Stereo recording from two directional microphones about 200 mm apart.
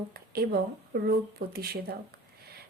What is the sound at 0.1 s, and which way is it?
A woman's voice, 50° right (ahead or behind).